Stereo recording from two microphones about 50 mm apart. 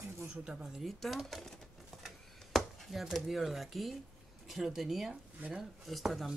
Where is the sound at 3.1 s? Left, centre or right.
Centre.